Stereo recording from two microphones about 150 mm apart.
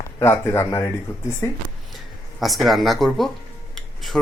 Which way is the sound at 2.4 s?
Centre (ahead or behind).